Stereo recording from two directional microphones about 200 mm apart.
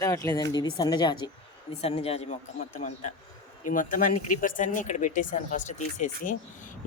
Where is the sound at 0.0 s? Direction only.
15° left (ahead or behind); by 2.4 s 30° left (ahead or behind).